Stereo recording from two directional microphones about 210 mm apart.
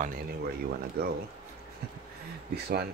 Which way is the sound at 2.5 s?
50° right (ahead or behind).